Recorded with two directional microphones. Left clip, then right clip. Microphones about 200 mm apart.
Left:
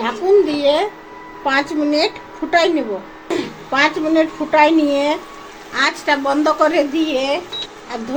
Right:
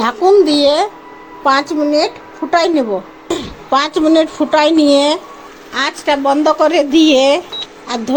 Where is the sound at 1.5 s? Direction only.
30° right (ahead or behind).